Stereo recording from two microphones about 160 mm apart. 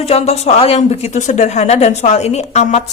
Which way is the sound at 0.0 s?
40° left (ahead or behind).